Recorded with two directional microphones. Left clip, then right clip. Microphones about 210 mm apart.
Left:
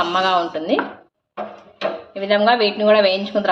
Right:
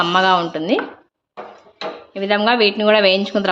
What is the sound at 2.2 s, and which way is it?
Speech, 30° right (ahead or behind).